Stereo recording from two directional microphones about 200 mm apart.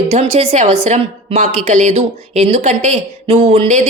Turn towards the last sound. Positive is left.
turn(degrees=-35)  # may be behind; listen again after turning